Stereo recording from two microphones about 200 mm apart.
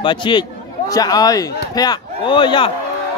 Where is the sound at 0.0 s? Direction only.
25° left (ahead or behind).